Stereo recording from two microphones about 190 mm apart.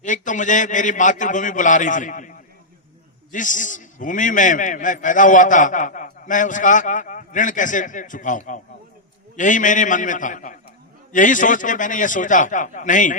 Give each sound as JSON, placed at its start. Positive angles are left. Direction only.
{"t": 0.0, "sound": "a man's voice", "side_deg": 40}
{"t": 3.3, "sound": "a man's voice", "side_deg": 40}